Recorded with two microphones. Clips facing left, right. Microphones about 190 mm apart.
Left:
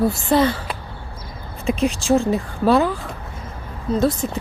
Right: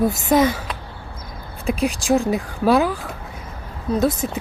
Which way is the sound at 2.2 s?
15° right (ahead or behind).